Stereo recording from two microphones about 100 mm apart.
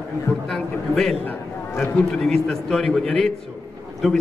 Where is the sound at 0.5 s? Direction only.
5° left (ahead or behind).